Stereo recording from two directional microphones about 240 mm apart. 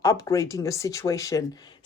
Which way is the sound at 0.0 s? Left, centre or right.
Centre.